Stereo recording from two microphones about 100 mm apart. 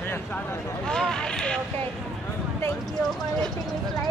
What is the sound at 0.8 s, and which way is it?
Speech, 5° left (ahead or behind).